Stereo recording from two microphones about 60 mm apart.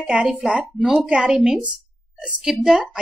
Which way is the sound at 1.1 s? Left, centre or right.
Centre.